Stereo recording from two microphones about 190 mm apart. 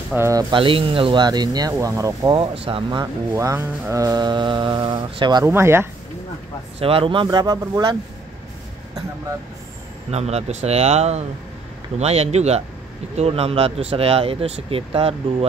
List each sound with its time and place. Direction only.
0.1 s speech: 15° right (ahead or behind)
2.3 s speech: 30° right (ahead or behind)
5.5 s speech: 10° right (ahead or behind)
6.8 s speech: 30° right (ahead or behind)
10.1 s speech: 35° right (ahead or behind)